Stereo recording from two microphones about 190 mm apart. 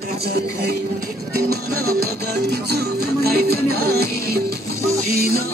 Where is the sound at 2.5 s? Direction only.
55° right (ahead or behind).